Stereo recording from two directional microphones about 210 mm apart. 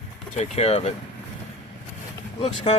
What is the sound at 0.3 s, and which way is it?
Speech, 30° left (ahead or behind).